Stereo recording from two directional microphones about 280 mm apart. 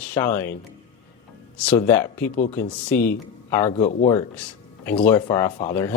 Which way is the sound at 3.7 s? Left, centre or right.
Left.